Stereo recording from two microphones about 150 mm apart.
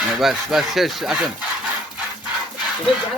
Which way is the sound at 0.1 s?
Centre (ahead or behind).